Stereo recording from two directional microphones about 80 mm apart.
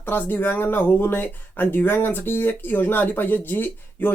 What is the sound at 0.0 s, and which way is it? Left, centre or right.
Speech, left.